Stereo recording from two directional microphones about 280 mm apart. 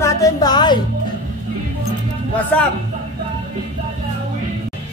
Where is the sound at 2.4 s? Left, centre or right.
Centre.